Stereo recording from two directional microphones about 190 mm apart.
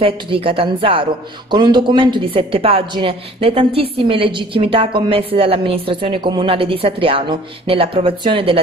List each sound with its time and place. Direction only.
0.0 s a woman's voice: 30° right (ahead or behind)